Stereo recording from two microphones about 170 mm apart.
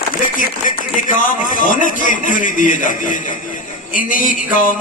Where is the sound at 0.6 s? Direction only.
50° left (ahead or behind).